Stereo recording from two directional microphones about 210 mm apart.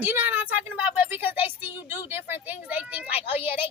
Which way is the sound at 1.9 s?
10° right (ahead or behind).